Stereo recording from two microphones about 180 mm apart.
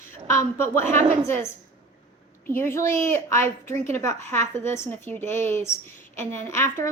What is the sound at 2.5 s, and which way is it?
A woman's voice, 10° left (ahead or behind).